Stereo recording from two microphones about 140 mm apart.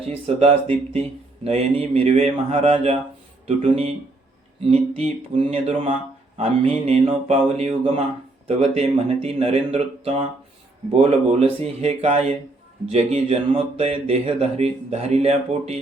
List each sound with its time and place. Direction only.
0.0 s speech: 45° right (ahead or behind)